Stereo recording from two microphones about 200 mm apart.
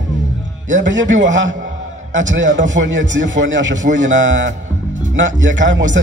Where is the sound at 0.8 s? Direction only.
65° right (ahead or behind).